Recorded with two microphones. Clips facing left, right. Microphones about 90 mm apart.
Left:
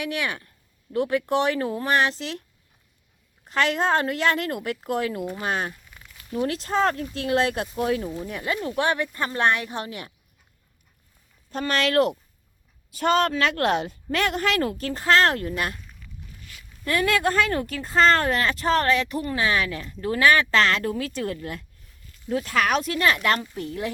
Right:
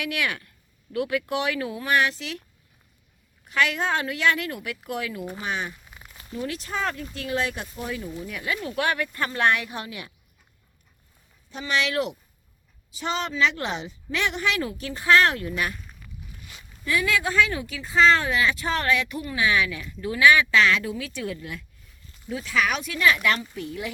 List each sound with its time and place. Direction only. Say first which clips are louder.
0.0 s speech: even; 30° left (ahead or behind)
3.5 s speech: left 2 dB; 35° left (ahead or behind)
7.6 s speech: left 8 dB; 55° left (ahead or behind)
8.2 s speech: left 2 dB; 35° left (ahead or behind)
11.5 s speech: left 4 dB; 45° left (ahead or behind)
15.7 s a sound: right 2 dB; centre (ahead or behind)
16.5 s a sound: right 1 dB; 20° right (ahead or behind)
16.8 s speech: left 2 dB; 50° left (ahead or behind)